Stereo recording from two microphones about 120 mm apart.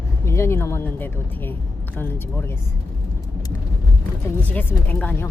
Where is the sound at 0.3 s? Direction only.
20° left (ahead or behind).